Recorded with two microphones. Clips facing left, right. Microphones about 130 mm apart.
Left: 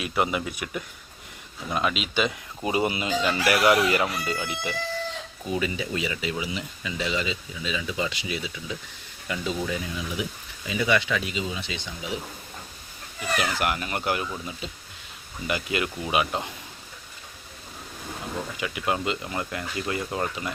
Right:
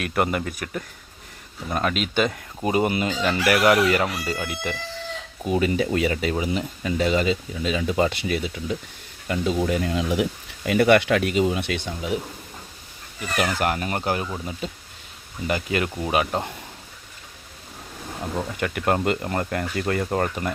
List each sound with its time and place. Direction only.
0.0 s speech: 55° right (ahead or behind); by 10.2 s 80° right
10.7 s speech: 60° right (ahead or behind)
13.4 s speech: 40° right (ahead or behind)
18.5 s speech: 55° right (ahead or behind)